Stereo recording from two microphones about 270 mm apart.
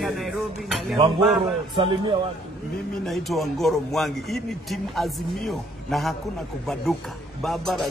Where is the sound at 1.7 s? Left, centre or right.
Centre.